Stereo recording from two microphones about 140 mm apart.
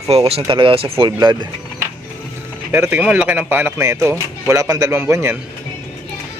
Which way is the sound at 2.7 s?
15° right (ahead or behind).